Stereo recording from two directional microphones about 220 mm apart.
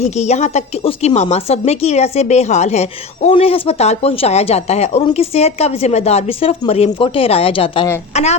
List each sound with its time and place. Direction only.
0.0 s a woman's voice: 30° left (ahead or behind)